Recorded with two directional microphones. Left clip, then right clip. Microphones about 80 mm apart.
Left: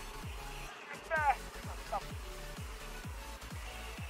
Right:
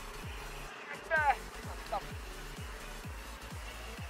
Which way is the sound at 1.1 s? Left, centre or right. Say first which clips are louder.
Right 2 dB; right.